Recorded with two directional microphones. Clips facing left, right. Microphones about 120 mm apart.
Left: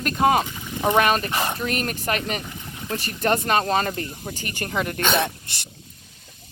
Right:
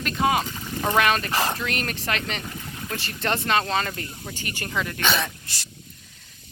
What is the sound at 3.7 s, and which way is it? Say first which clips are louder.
Speech: left 4 dB; 35° left (ahead or behind).